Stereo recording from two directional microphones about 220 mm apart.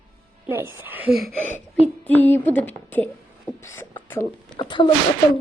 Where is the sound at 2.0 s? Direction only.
10° left (ahead or behind).